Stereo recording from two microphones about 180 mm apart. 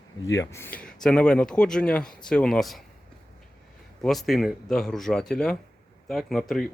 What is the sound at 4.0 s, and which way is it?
Speech, centre (ahead or behind).